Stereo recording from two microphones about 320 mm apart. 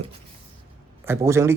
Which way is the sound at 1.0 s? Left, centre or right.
Centre.